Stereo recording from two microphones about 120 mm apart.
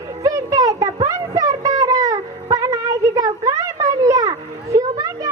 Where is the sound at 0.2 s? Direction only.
25° right (ahead or behind).